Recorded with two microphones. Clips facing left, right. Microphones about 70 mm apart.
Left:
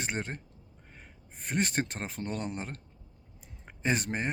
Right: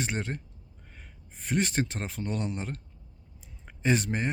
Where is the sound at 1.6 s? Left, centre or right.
Left.